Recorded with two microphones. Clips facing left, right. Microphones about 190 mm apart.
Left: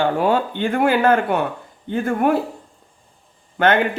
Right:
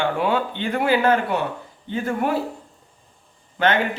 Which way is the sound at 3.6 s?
55° left (ahead or behind).